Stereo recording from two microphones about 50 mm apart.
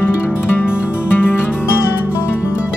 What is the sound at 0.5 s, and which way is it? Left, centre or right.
Music, left.